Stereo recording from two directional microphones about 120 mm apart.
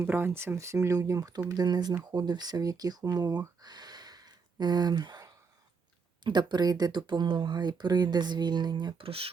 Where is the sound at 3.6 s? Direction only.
35° right (ahead or behind).